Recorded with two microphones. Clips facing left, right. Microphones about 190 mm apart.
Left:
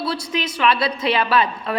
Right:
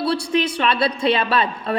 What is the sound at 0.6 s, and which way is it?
A woman's voice, 30° right (ahead or behind).